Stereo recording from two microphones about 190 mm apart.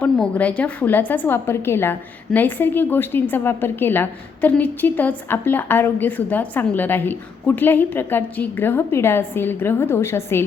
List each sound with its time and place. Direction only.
0.0 s a woman's voice: 5° left (ahead or behind)